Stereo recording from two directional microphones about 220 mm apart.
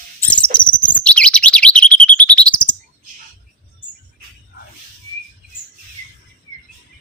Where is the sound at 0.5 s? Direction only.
20° left (ahead or behind).